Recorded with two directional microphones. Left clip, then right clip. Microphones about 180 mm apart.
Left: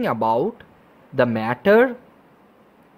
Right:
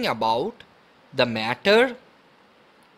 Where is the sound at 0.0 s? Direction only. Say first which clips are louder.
Left 3 dB; 15° right (ahead or behind).